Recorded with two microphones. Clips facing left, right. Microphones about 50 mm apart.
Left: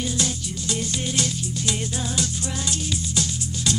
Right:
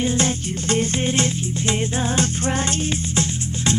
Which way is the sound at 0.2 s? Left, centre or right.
Right.